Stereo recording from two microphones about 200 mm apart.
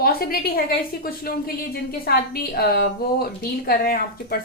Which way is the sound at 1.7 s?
50° left (ahead or behind).